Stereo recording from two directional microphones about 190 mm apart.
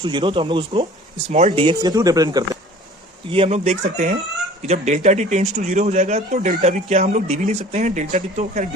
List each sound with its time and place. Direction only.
0.0 s speech: 25° right (ahead or behind)
3.2 s speech: 30° right (ahead or behind)